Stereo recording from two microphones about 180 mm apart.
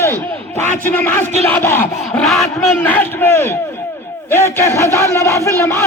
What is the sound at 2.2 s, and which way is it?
Speech, centre (ahead or behind).